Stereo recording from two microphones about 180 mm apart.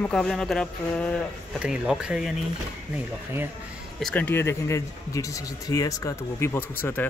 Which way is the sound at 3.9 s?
5° left (ahead or behind).